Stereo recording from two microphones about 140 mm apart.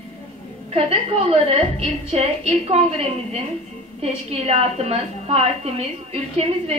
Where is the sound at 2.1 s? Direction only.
45° right (ahead or behind).